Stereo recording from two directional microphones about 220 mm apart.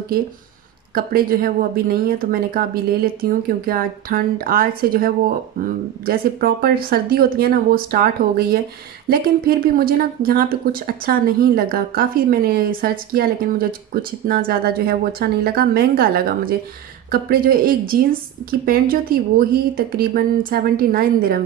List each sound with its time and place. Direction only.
0.9 s speech: 40° right (ahead or behind)